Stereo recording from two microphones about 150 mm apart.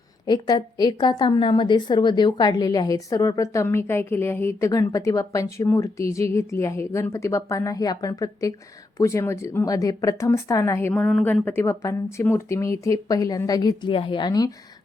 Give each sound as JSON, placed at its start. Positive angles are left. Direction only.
{"t": 0.3, "sound": "a woman's voice", "side_deg": 30}